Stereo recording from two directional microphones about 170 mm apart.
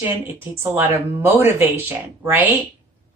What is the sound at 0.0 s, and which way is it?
Speech, 15° right (ahead or behind).